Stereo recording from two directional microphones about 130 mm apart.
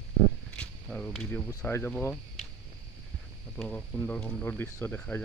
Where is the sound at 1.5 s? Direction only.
20° left (ahead or behind).